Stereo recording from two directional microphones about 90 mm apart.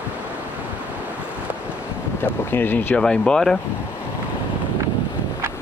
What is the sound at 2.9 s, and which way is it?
Speech, 10° left (ahead or behind).